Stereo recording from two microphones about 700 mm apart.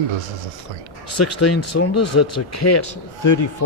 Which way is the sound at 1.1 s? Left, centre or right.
Left.